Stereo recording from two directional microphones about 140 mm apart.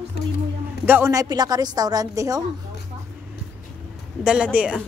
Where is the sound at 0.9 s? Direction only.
20° right (ahead or behind).